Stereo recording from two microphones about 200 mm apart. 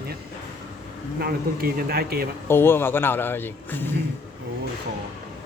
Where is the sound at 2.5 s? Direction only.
10° left (ahead or behind).